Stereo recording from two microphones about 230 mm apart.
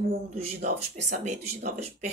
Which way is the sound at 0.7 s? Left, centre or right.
Right.